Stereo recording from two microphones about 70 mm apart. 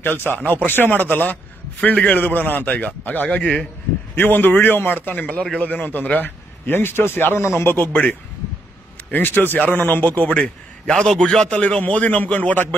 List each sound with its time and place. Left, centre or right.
0.0 s a man's voice: left
7.7 s a man's voice: left